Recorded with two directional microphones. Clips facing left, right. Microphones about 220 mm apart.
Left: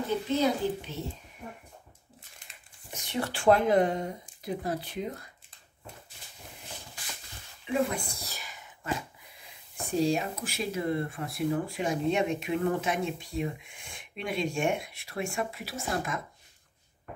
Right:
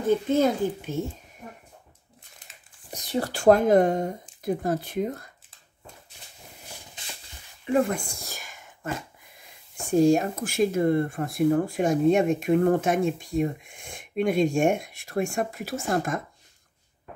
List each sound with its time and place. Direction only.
0.3 s speech: 50° right (ahead or behind)
2.9 s speech: 35° right (ahead or behind)
7.0 s a sound: 20° right (ahead or behind)
7.9 s whispering: 45° right (ahead or behind)
9.9 s speech: 50° right (ahead or behind)